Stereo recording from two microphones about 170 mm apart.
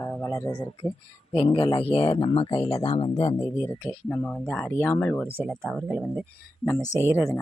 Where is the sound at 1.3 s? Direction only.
30° left (ahead or behind).